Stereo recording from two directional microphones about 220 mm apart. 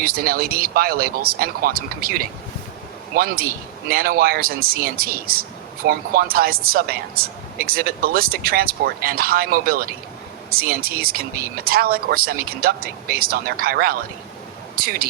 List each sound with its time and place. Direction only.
0.0 s speech: 45° right (ahead or behind)